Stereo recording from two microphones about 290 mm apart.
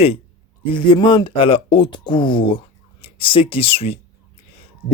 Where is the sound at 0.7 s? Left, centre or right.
Centre.